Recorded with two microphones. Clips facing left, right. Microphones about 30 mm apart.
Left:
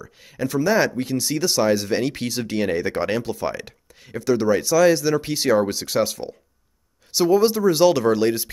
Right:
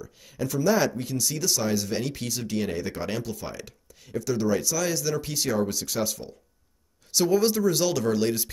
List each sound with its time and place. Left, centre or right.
0.0 s speech: left
7.1 s speech: centre